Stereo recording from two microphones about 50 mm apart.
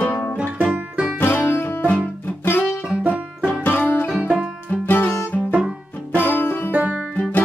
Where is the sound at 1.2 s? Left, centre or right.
Left.